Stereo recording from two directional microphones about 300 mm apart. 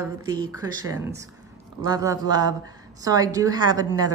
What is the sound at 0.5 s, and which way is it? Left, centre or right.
A woman's voice, centre.